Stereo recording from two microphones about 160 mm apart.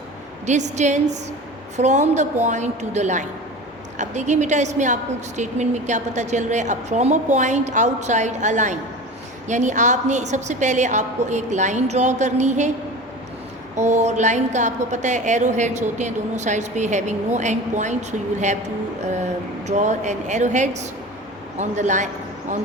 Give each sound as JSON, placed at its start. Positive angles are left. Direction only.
{"t": 0.4, "sound": "a woman's voice", "side_deg": -45}
{"t": 13.7, "sound": "a woman's voice", "side_deg": -45}
{"t": 19.0, "sound": "a woman's voice", "side_deg": -45}